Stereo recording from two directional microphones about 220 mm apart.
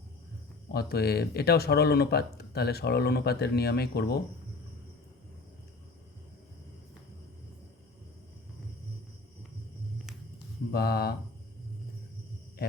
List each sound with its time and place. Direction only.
0.7 s speech: 45° left (ahead or behind)
10.7 s speech: 45° left (ahead or behind)